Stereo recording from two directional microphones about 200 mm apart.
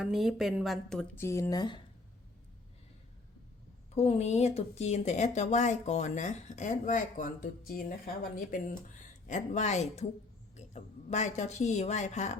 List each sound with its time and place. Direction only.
0.0 s speech: centre (ahead or behind); by 1.8 s 20° left (ahead or behind)
3.9 s a woman's voice: 30° left (ahead or behind)